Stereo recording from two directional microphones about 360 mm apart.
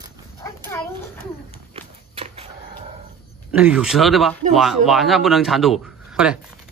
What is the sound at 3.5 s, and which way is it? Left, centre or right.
A man's voice, centre.